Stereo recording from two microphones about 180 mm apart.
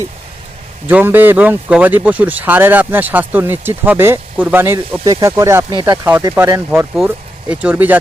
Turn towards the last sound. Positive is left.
turn(degrees=-10)  # may be behind; listen again after turning